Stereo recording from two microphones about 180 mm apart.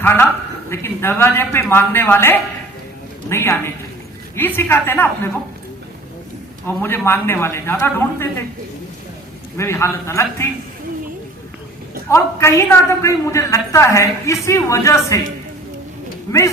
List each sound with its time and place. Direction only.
0.0 s a woman's voice: 10° left (ahead or behind)
6.7 s a woman's voice: 10° left (ahead or behind)
9.6 s a woman's voice: 15° left (ahead or behind)
12.0 s a woman's voice: 15° left (ahead or behind)